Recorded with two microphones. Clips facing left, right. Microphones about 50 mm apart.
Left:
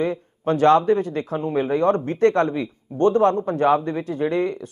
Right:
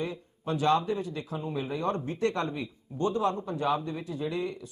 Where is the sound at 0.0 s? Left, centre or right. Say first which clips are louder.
Left 11 dB; left.